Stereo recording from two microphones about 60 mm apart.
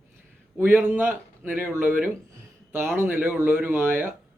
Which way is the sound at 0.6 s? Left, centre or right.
Right.